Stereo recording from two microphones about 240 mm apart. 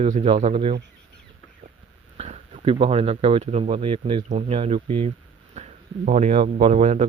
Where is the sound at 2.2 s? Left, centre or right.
Right.